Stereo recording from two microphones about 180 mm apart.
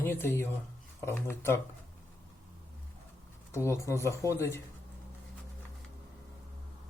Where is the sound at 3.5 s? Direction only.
15° left (ahead or behind).